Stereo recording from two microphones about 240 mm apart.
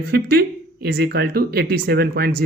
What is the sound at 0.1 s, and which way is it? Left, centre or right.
Speech, right.